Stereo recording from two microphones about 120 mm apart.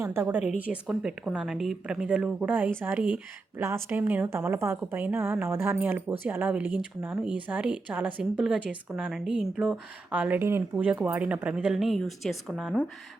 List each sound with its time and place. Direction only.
0.0 s a woman's voice: 20° right (ahead or behind); by 12.7 s centre (ahead or behind)